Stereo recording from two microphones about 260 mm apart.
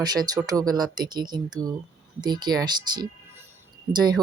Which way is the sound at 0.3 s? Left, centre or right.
Centre.